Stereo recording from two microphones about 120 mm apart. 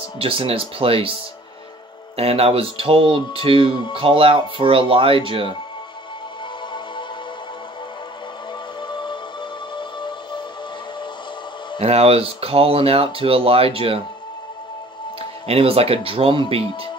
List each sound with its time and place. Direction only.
0.2 s speech: 50° right (ahead or behind)
2.1 s speech: 55° right (ahead or behind)
8.8 s music: 40° left (ahead or behind)
11.8 s speech: 60° right (ahead or behind)
15.4 s speech: 55° right (ahead or behind)